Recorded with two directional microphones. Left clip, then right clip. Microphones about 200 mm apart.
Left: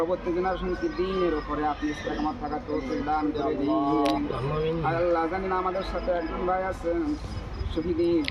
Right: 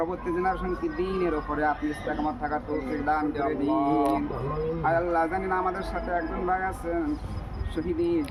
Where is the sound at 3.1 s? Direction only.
Centre (ahead or behind).